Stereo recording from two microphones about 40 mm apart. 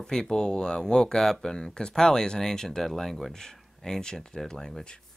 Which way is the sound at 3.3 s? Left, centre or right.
Centre.